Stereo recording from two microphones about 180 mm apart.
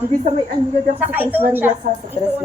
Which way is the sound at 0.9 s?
10° right (ahead or behind).